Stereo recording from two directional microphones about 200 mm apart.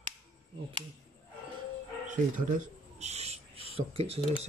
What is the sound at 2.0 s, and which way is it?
Speech, 40° right (ahead or behind).